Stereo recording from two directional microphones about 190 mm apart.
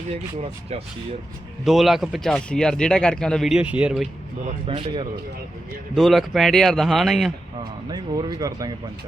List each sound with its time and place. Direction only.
1.6 s speech: centre (ahead or behind)
4.6 s speech: 25° right (ahead or behind)
5.9 s speech: centre (ahead or behind)
7.9 s speech: 20° right (ahead or behind)